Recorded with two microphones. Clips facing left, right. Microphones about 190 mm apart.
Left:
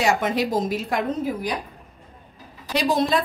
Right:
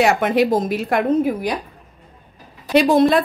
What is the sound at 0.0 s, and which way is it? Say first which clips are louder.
A woman's voice: right 6 dB; 60° right (ahead or behind).